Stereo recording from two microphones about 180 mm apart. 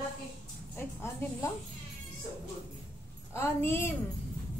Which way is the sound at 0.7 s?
15° left (ahead or behind).